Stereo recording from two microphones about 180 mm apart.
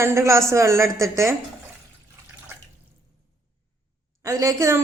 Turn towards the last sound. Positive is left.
turn(degrees=-20)  # may be behind; listen again after turning